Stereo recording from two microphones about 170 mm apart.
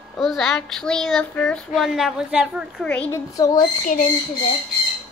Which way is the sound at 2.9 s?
10° left (ahead or behind).